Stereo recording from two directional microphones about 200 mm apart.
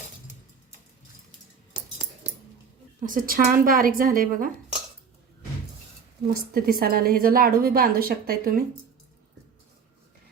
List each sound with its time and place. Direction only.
3.0 s a woman's voice: 45° right (ahead or behind)
6.5 s a woman's voice: 45° right (ahead or behind)